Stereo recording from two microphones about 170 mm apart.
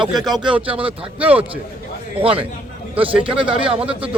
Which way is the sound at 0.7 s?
30° right (ahead or behind).